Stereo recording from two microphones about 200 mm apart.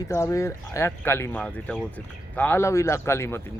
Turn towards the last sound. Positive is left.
turn(degrees=15)  # may be behind; listen again after turning